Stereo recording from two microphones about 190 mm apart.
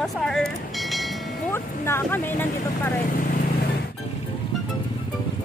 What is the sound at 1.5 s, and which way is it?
Speech, 10° left (ahead or behind).